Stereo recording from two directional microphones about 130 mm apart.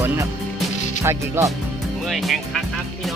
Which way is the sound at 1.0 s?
20° right (ahead or behind).